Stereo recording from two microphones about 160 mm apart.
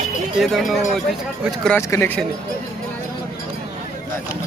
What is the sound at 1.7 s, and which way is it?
Speech, 15° left (ahead or behind).